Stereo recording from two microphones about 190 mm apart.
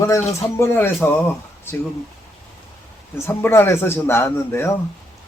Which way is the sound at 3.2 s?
10° left (ahead or behind).